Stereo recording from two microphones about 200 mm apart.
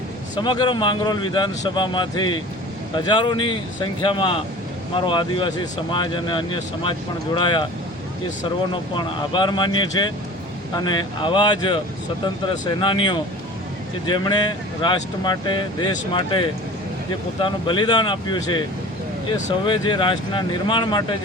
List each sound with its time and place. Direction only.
0.3 s speech: 20° left (ahead or behind)
9.0 s speech: 25° left (ahead or behind)